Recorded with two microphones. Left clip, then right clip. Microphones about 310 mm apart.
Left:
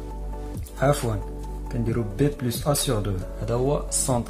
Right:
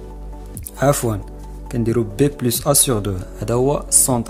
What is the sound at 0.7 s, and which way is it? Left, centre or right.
Speech, right.